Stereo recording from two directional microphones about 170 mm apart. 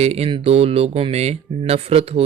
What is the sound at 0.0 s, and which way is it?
Speech, 35° right (ahead or behind).